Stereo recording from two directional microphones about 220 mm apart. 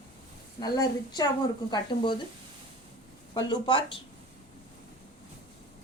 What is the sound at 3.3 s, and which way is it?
Speech, 20° left (ahead or behind).